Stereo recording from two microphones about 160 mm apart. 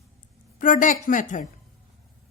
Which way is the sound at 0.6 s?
55° left (ahead or behind).